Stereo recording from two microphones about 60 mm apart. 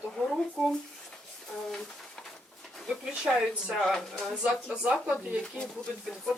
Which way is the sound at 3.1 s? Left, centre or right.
Centre.